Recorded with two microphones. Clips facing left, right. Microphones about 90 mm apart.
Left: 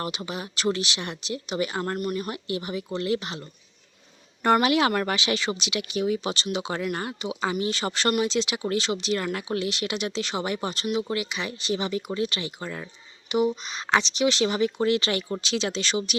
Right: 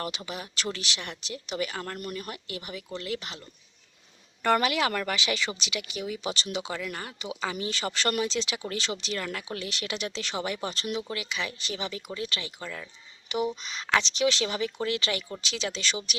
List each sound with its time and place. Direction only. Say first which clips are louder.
0.0 s speech: left 3 dB; 25° left (ahead or behind)
4.4 s speech: left 4 dB; 20° left (ahead or behind)